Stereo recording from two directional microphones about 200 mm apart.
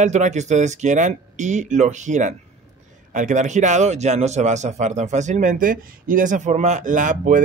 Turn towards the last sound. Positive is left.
turn(degrees=-40)  # may be behind; listen again after turning